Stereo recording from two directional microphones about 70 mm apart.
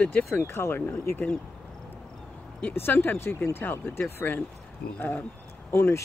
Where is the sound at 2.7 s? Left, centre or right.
Left.